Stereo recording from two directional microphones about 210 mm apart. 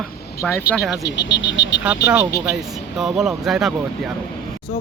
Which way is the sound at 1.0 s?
55° left (ahead or behind).